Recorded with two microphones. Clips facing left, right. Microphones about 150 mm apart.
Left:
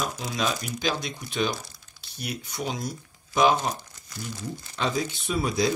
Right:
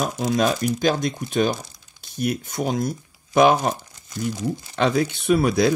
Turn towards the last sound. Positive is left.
turn(degrees=-65)  # may be behind; listen again after turning